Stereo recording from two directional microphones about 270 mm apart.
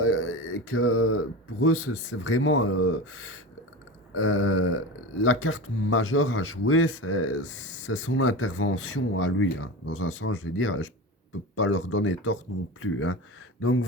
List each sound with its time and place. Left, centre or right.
0.0 s speech: left